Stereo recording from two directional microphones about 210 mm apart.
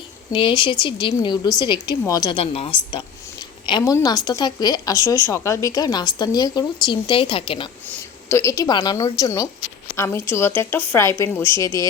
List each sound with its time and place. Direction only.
0.3 s a woman's voice: 25° left (ahead or behind)
8.3 s a woman's voice: 15° left (ahead or behind)